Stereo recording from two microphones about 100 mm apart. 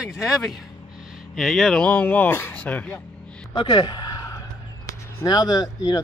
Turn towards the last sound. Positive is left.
turn(degrees=40)  # may be behind; listen again after turning